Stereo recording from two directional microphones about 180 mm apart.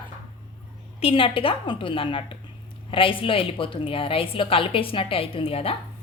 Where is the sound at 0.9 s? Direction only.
30° left (ahead or behind).